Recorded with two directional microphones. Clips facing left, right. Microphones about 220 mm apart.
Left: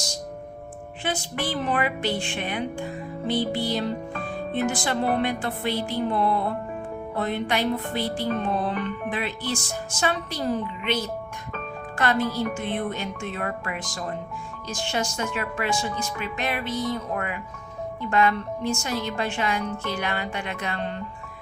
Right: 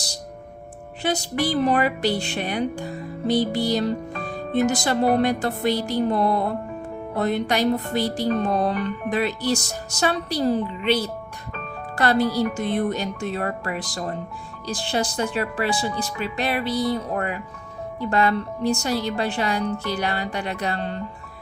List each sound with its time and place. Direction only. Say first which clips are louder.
1.0 s speech: right 5 dB; 40° right (ahead or behind)